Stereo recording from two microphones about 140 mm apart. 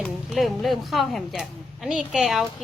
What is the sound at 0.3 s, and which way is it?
Speech, centre (ahead or behind).